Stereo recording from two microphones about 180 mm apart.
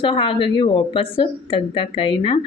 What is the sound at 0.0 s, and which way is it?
Speech, 30° left (ahead or behind).